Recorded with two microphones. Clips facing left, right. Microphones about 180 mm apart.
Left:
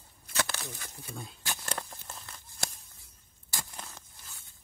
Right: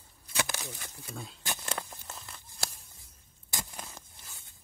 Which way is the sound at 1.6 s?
Centre (ahead or behind).